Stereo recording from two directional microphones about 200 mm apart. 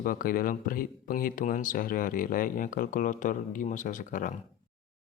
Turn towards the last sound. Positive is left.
turn(degrees=40)  # may be behind; listen again after turning